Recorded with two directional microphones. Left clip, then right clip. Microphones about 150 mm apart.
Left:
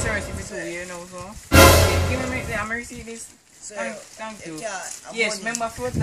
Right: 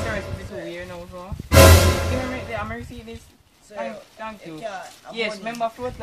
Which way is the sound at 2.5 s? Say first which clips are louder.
Left 3 dB; 10° left (ahead or behind).